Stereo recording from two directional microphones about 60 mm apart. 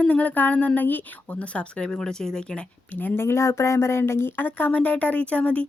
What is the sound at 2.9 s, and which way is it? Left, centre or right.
Speech, left.